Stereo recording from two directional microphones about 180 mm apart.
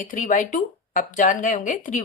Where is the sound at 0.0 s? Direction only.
45° left (ahead or behind).